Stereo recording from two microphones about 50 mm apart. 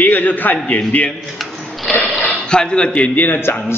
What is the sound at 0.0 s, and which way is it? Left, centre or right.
A man's voice, left.